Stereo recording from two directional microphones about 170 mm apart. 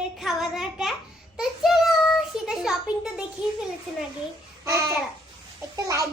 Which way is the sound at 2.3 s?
5° right (ahead or behind).